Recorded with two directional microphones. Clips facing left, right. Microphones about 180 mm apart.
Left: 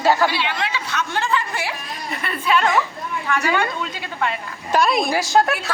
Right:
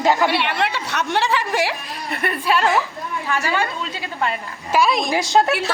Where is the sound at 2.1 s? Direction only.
55° right (ahead or behind).